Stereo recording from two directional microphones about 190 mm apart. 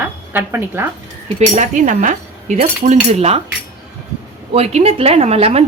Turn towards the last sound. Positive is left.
turn(degrees=-30)  # may be behind; listen again after turning